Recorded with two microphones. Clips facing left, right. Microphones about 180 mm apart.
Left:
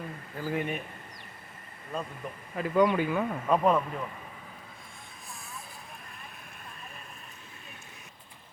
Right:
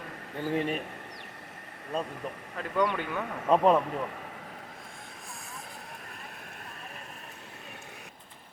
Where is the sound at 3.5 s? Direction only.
25° right (ahead or behind).